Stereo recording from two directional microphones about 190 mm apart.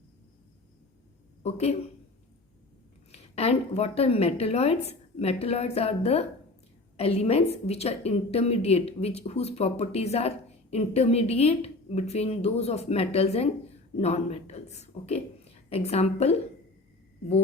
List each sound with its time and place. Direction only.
1.4 s speech: 35° left (ahead or behind)
3.1 s a woman's voice: 35° left (ahead or behind)